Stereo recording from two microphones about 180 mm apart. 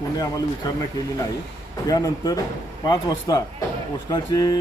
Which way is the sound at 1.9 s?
20° left (ahead or behind).